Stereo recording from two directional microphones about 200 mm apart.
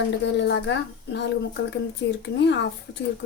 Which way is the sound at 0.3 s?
60° left (ahead or behind).